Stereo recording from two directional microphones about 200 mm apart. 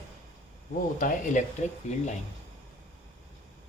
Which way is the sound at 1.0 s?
40° left (ahead or behind).